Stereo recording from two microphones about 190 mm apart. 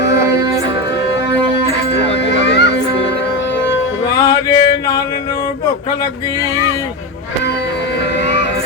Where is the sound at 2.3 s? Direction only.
60° left (ahead or behind).